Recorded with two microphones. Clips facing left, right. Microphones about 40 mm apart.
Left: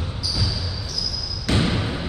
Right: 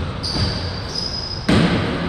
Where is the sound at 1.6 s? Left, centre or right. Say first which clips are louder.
Right 5 dB; right.